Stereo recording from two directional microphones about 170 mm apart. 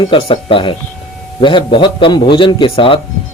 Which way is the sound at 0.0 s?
30° left (ahead or behind).